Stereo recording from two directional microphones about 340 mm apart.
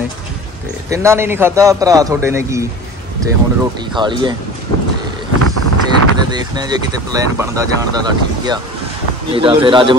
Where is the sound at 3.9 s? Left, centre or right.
Centre.